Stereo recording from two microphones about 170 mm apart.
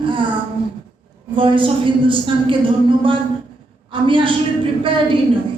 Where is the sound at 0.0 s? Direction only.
30° right (ahead or behind).